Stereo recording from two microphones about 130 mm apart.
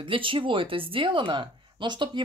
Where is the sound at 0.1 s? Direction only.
40° right (ahead or behind).